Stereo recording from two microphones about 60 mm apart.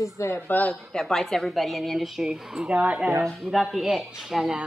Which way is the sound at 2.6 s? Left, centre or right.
Right.